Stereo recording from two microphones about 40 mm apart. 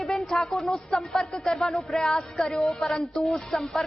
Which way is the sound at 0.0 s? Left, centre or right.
Centre.